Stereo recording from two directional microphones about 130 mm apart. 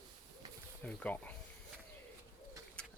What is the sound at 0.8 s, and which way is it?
Speech, 10° left (ahead or behind).